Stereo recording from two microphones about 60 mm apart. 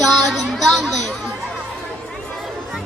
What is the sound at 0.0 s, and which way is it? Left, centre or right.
Music, centre.